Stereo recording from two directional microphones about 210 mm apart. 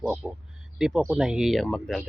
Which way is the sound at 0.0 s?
Centre (ahead or behind).